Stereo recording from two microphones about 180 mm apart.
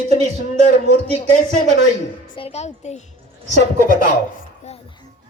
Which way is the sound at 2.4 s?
35° left (ahead or behind).